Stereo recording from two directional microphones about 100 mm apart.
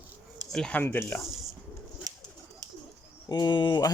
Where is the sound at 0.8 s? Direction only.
20° left (ahead or behind).